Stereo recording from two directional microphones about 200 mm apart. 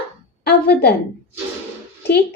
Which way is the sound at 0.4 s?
55° left (ahead or behind).